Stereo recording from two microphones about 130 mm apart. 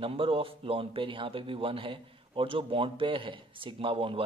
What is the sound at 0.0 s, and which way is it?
A man's voice, 45° right (ahead or behind).